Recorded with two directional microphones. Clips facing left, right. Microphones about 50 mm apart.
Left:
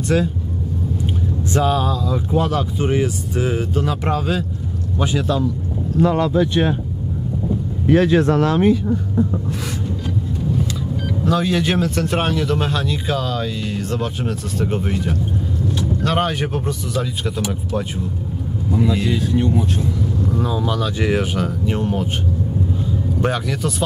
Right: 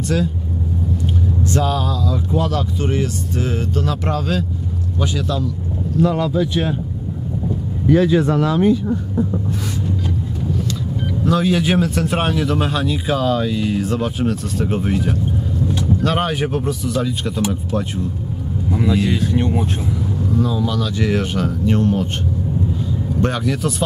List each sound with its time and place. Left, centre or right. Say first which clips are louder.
0.1 s speech: left 2 dB; left
1.5 s speech: left 3 dB; centre
11.2 s speech: right 2 dB; centre
19.3 s speech: left 1 dB; right
20.3 s speech: right 3 dB; centre
23.2 s speech: right 2 dB; centre